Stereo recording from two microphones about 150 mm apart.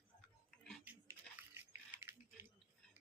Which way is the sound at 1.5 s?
15° right (ahead or behind).